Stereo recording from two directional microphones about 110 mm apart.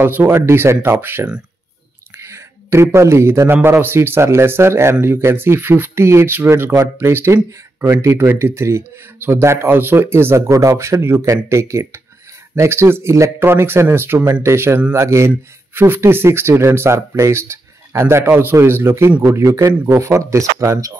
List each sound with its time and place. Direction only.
0.0 s speech: 20° right (ahead or behind)